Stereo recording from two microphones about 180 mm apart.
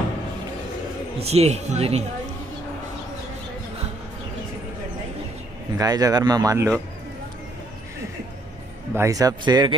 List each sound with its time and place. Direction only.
1.2 s speech: 35° right (ahead or behind)
5.8 s speech: 20° right (ahead or behind)
8.9 s speech: 15° right (ahead or behind)